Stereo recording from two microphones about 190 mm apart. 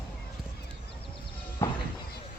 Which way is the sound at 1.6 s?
15° left (ahead or behind).